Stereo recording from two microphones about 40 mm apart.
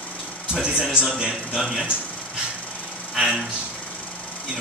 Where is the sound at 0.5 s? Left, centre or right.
Right.